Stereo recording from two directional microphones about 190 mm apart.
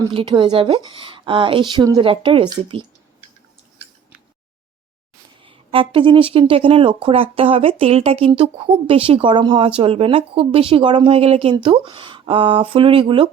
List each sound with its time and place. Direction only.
0.0 s speech: 25° right (ahead or behind)
5.4 s speech: 25° right (ahead or behind)